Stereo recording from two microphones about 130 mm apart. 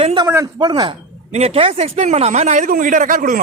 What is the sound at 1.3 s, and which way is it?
Speech, 50° right (ahead or behind).